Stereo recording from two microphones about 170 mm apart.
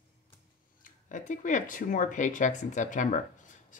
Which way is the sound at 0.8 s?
50° left (ahead or behind).